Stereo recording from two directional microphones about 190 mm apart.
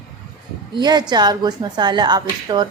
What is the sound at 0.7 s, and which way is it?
A woman's voice, 20° right (ahead or behind).